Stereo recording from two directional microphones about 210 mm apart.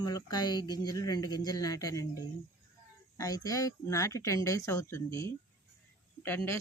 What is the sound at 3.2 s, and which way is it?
A woman's voice, 15° left (ahead or behind).